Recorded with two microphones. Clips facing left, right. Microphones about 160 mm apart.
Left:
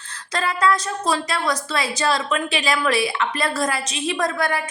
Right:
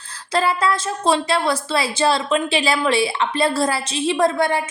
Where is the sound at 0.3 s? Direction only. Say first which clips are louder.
Right 2 dB; 30° right (ahead or behind).